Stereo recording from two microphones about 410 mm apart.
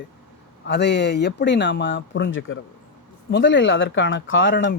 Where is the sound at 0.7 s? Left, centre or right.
Left.